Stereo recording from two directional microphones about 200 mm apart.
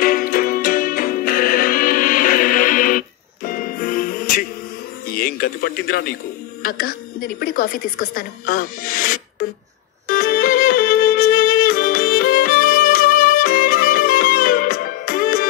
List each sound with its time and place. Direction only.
0.0 s music: 45° left (ahead or behind)
5.0 s a woman's voice: 50° left (ahead or behind)
10.0 s music: 45° left (ahead or behind)